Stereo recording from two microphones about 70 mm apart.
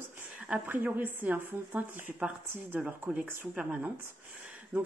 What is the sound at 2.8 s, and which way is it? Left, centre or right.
Speech, centre.